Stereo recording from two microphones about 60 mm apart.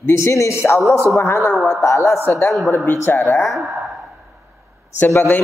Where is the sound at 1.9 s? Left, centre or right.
Left.